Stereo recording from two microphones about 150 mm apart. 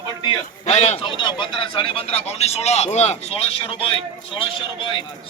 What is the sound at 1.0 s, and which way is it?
A man's voice, 30° left (ahead or behind).